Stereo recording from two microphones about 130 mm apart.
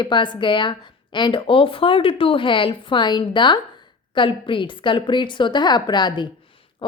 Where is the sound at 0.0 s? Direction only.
35° left (ahead or behind).